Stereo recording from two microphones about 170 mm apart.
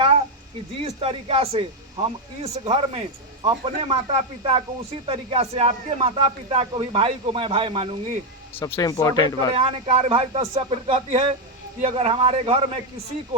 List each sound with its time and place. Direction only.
0.9 s speech: 35° right (ahead or behind)
8.5 s speech: 15° left (ahead or behind)
9.6 s speech: 35° right (ahead or behind)